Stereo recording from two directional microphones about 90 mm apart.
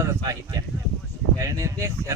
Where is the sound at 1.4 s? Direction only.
35° right (ahead or behind).